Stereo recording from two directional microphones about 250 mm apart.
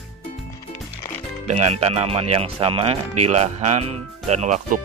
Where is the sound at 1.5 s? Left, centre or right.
Right.